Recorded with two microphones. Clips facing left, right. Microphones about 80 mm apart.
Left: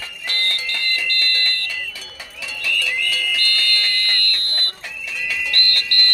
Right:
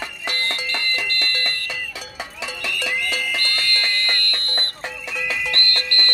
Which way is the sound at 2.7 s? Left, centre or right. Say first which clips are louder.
Left 2 dB; right.